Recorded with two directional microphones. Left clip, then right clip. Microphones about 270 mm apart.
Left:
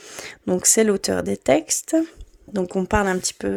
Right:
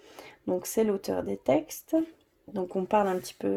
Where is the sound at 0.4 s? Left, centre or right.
Left.